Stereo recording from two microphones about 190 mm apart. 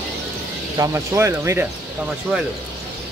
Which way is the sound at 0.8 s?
15° right (ahead or behind).